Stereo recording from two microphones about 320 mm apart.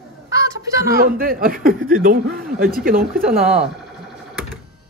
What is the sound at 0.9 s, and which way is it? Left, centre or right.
Speech, right.